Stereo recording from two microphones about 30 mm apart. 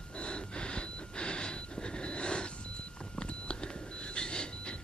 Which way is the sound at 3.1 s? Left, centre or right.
Left.